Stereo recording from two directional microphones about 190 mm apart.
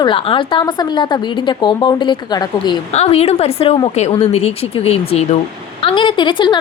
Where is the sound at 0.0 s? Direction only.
25° left (ahead or behind).